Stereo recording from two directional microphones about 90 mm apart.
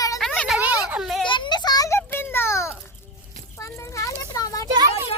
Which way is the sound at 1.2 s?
60° left (ahead or behind).